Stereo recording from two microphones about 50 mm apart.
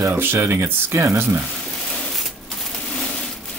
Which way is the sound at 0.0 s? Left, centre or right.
Right.